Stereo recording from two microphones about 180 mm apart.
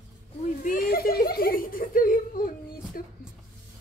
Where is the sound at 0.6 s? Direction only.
55° left (ahead or behind).